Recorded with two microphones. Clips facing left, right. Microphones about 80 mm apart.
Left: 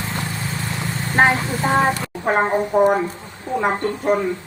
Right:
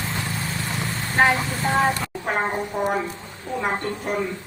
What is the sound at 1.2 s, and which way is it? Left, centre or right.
Vehicle, left.